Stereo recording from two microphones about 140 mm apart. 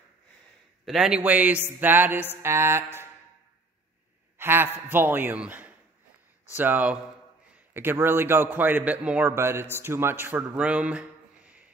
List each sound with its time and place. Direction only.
0.8 s a man's voice: 5° right (ahead or behind)
4.4 s a man's voice: 15° right (ahead or behind)